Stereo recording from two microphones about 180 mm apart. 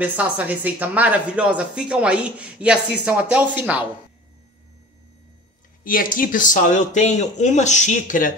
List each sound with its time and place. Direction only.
0.0 s speech: 10° right (ahead or behind)
5.9 s speech: 50° left (ahead or behind)